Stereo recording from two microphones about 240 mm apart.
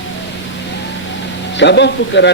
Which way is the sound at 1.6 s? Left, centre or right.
Left.